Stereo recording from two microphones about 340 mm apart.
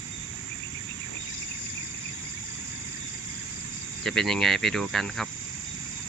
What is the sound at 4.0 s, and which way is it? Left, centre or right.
Speech, centre.